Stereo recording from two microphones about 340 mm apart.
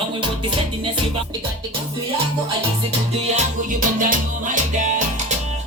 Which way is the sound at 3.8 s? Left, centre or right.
Right.